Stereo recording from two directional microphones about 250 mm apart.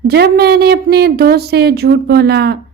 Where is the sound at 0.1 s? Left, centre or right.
Right.